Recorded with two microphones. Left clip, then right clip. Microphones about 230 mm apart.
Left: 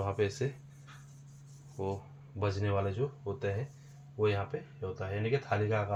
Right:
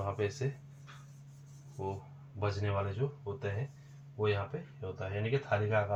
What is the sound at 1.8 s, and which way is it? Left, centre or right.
Speech, left.